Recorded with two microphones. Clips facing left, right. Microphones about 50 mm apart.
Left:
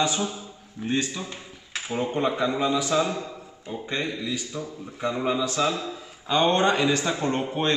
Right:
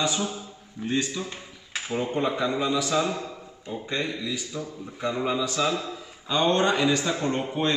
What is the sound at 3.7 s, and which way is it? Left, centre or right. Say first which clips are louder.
Speech: even; left.